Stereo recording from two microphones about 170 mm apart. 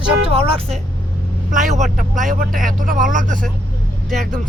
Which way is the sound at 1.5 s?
50° right (ahead or behind).